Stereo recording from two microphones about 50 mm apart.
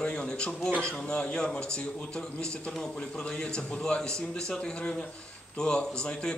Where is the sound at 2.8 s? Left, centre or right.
Centre.